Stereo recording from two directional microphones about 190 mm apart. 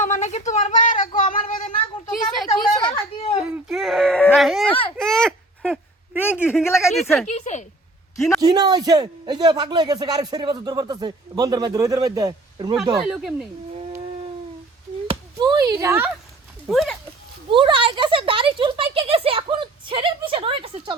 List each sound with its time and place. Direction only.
0.0 s a sound: 40° left (ahead or behind)
2.7 s a sound: 25° left (ahead or behind)
3.4 s a sound: centre (ahead or behind); by 6.9 s 15° left (ahead or behind)
6.9 s speech: centre (ahead or behind)
7.3 s a woman's voice: 35° left (ahead or behind)
8.4 s speech: 20° right (ahead or behind)
13.0 s speech: centre (ahead or behind)
15.4 s speech: 20° right (ahead or behind)
16.6 s speech: centre (ahead or behind)
17.5 s speech: 25° right (ahead or behind)